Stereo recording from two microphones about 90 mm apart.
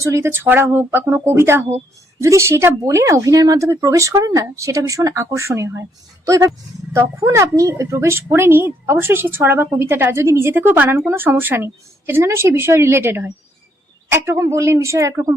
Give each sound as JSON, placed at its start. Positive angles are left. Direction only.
{"t": 0.0, "sound": "speech", "side_deg": -30}